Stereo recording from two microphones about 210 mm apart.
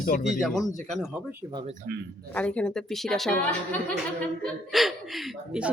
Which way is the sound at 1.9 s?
45° right (ahead or behind).